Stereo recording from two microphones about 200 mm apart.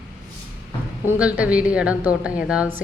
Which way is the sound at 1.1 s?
5° right (ahead or behind).